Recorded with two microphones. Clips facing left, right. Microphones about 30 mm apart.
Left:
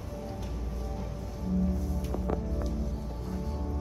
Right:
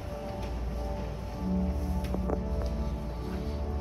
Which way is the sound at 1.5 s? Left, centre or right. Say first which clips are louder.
Left 4 dB; right.